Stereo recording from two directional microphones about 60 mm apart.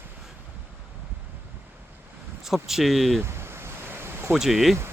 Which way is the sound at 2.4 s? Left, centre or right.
Centre.